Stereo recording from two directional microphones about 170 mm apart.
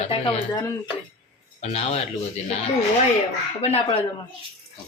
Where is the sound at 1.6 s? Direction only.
40° left (ahead or behind).